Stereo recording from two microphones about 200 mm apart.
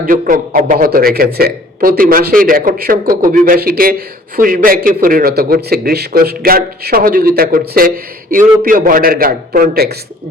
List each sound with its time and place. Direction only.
0.0 s a man's voice: 45° right (ahead or behind)